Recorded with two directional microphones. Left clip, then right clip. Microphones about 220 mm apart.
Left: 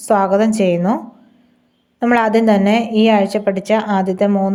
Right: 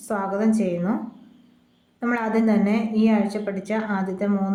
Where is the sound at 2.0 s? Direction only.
35° left (ahead or behind).